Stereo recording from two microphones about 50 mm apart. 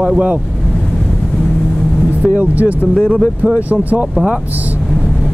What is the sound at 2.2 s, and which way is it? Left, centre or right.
Speech, right.